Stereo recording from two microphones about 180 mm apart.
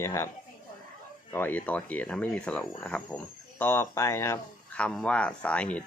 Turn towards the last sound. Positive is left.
turn(degrees=5)  # may be behind; listen again after turning